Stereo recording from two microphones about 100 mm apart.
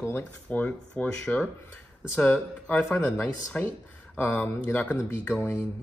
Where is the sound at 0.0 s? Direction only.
20° left (ahead or behind).